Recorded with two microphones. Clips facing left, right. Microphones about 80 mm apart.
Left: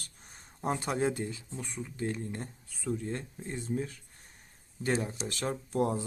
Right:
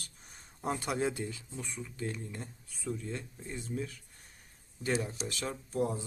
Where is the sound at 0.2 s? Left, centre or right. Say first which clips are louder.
Left 4 dB; left.